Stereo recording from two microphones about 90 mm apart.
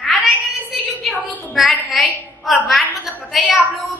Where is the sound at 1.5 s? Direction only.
Centre (ahead or behind).